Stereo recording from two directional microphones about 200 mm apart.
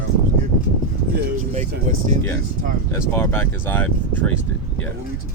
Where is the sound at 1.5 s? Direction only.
40° right (ahead or behind).